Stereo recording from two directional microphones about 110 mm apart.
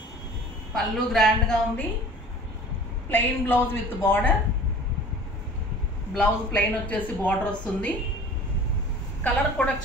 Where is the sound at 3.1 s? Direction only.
20° left (ahead or behind).